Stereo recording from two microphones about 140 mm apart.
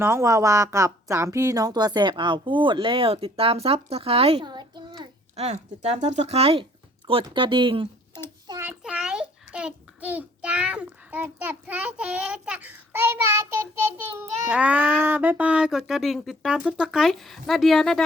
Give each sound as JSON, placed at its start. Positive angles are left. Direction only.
{"t": 0.0, "sound": "a woman's voice", "side_deg": -20}
{"t": 4.4, "sound": "a sound", "side_deg": -35}
{"t": 5.4, "sound": "a woman's voice", "side_deg": -50}
{"t": 8.8, "sound": "a child's voice", "side_deg": -5}